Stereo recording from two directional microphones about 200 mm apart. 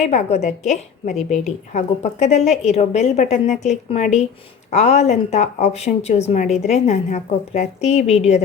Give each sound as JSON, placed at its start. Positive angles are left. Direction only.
{"t": 0.0, "sound": "a woman's voice", "side_deg": 35}